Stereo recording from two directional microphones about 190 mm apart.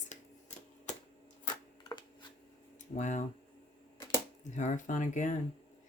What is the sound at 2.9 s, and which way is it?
Speech, 40° left (ahead or behind).